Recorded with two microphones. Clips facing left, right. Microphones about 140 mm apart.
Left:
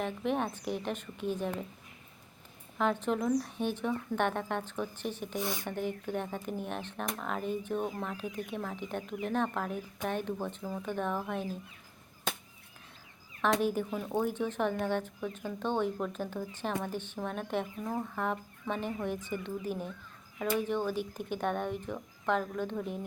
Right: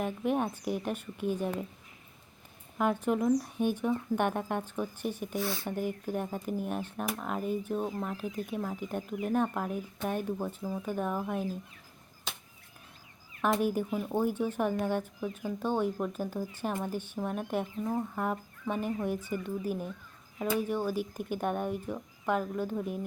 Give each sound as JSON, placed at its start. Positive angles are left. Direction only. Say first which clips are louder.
{"t": 0.0, "sound": "speech", "louder": "right 2 dB", "side_deg": -10}
{"t": 2.7, "sound": "speech", "louder": "right 2 dB", "side_deg": -10}
{"t": 5.4, "sound": "speech", "louder": "right 1 dB", "side_deg": 15}
{"t": 5.6, "sound": "speech", "louder": "right 2 dB", "side_deg": -10}
{"t": 13.6, "sound": "speech", "louder": "right 1 dB", "side_deg": -10}